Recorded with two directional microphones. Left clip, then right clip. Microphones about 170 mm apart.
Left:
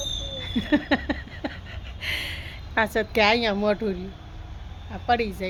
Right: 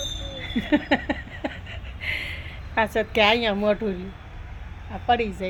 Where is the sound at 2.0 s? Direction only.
15° left (ahead or behind).